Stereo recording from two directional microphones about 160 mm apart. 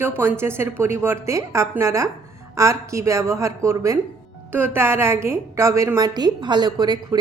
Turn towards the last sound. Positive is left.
turn(degrees=-25)  # may be behind; listen again after turning